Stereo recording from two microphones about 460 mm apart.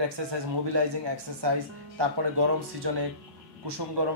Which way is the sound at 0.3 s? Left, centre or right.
Right.